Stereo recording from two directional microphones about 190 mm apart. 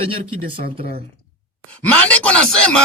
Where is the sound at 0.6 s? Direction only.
45° right (ahead or behind).